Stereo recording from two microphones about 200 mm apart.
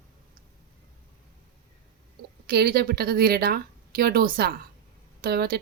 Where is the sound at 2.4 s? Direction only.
50° right (ahead or behind).